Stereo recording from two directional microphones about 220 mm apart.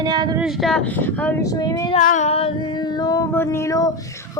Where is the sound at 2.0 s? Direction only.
35° left (ahead or behind); by 3.9 s 15° left (ahead or behind).